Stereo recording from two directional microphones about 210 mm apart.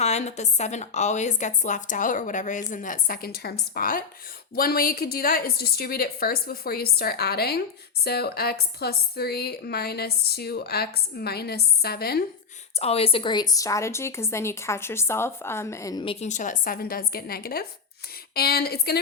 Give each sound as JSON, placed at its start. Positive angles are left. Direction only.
{"t": 0.0, "sound": "a woman's voice", "side_deg": 30}
{"t": 12.8, "sound": "a woman's voice", "side_deg": 30}
{"t": 16.2, "sound": "a woman's voice", "side_deg": 35}